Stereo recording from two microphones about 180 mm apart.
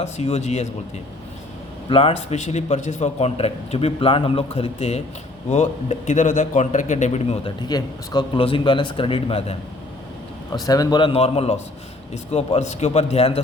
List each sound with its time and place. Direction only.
0.0 s a man's voice: 35° left (ahead or behind)
1.9 s a man's voice: 30° left (ahead or behind)
7.6 s a man's voice: 20° left (ahead or behind)
10.7 s a man's voice: 20° left (ahead or behind)